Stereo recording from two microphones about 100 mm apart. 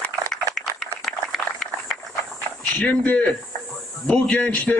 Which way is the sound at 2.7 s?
15° left (ahead or behind).